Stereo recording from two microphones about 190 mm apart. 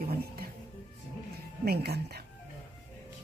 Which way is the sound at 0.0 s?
50° right (ahead or behind).